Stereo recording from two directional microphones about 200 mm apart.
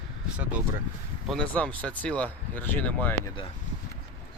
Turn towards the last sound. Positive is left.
turn(degrees=10)  # may be behind; listen again after turning